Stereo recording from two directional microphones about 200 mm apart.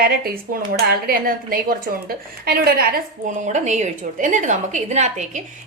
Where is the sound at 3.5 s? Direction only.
35° right (ahead or behind).